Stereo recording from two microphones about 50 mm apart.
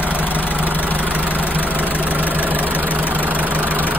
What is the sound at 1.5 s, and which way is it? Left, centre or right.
Vehicle, left.